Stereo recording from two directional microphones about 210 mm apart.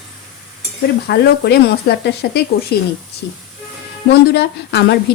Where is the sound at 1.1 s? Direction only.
50° left (ahead or behind).